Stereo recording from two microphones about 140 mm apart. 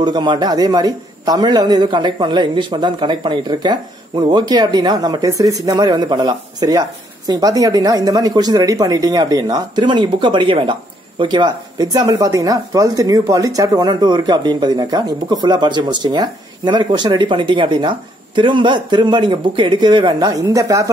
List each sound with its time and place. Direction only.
0.0 s a man's voice: 30° right (ahead or behind)